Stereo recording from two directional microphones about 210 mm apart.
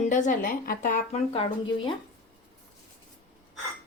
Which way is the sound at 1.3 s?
25° left (ahead or behind).